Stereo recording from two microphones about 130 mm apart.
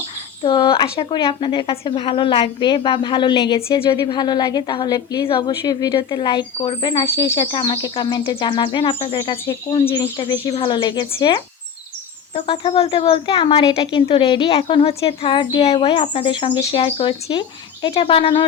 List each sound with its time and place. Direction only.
0.4 s speech: 40° left (ahead or behind)